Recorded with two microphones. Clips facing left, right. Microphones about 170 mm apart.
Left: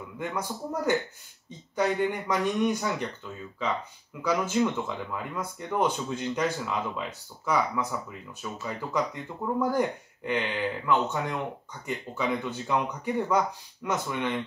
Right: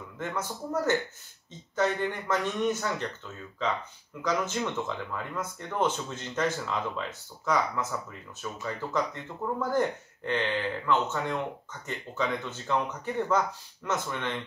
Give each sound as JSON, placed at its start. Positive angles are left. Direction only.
{"t": 0.2, "sound": "speech", "side_deg": 15}
{"t": 4.2, "sound": "speech", "side_deg": 10}